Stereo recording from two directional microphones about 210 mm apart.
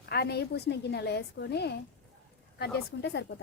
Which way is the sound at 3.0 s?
55° left (ahead or behind).